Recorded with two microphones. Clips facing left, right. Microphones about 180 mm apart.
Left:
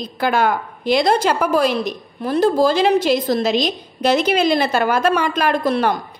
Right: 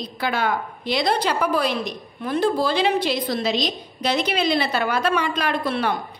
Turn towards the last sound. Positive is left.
turn(degrees=40)  # may be behind; listen again after turning